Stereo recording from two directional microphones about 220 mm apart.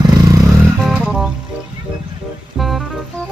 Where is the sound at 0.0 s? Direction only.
15° right (ahead or behind).